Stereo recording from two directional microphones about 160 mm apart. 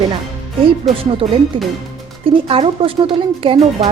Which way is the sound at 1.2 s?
35° right (ahead or behind).